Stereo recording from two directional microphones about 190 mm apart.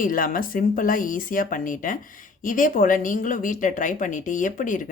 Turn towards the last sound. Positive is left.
turn(degrees=45)  # may be behind; listen again after turning